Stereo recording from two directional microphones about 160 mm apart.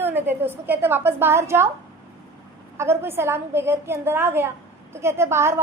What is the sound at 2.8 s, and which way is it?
A woman's voice, 15° right (ahead or behind).